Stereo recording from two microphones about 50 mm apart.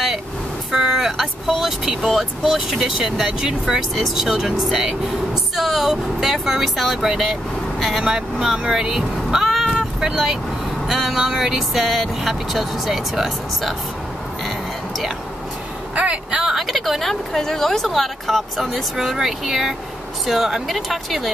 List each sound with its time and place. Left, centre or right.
0.7 s speech: centre
15.9 s vehicle: right
16.3 s a sound: centre
16.5 s a woman's voice: centre